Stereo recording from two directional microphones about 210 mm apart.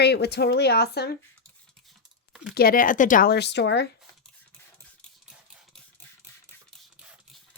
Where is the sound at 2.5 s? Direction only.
45° left (ahead or behind).